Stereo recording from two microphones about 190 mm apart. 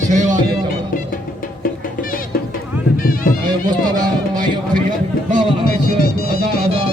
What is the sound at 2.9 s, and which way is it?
Music, 50° left (ahead or behind).